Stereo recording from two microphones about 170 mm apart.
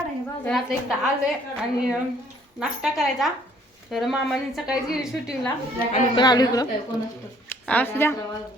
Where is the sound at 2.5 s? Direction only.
Centre (ahead or behind).